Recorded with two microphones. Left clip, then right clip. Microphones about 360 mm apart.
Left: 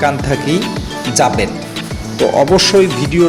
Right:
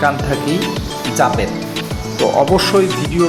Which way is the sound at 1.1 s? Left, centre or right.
Right.